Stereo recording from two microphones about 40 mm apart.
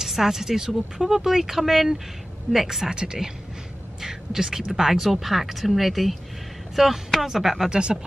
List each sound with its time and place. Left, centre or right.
0.0 s speech: centre
2.9 s speech: centre
7.7 s speech: right